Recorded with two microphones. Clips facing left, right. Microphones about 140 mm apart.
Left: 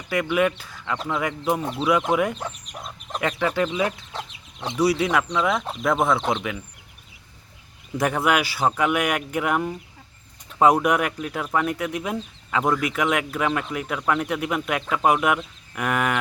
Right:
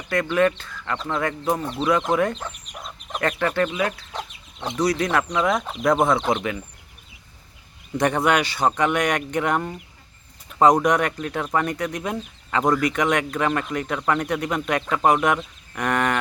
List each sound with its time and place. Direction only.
0.1 s speech: 10° left (ahead or behind)
2.7 s chicken: centre (ahead or behind)
3.7 s speech: 20° left (ahead or behind)
4.8 s speech: 10° left (ahead or behind)
7.9 s speech: 5° left (ahead or behind)
10.8 s speech: 5° left (ahead or behind)